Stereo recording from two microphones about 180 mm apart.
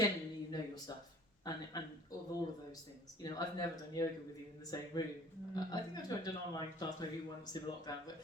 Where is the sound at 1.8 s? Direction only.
25° left (ahead or behind).